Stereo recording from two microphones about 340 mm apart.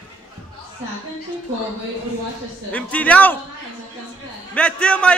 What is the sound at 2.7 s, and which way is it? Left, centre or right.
Speech, centre.